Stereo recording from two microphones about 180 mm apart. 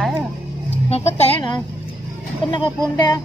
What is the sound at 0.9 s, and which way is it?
Speech, 35° left (ahead or behind).